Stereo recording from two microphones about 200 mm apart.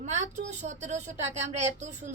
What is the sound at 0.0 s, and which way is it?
Speech, 35° right (ahead or behind).